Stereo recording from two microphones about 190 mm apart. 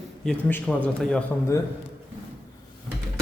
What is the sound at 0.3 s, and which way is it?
Speech, 5° left (ahead or behind).